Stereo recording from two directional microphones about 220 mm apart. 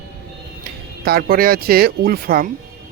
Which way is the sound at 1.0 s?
45° right (ahead or behind).